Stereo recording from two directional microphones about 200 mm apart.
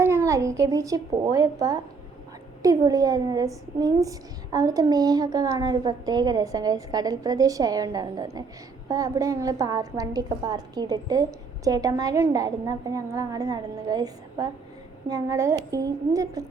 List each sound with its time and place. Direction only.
0.0 s a woman's voice: 15° right (ahead or behind)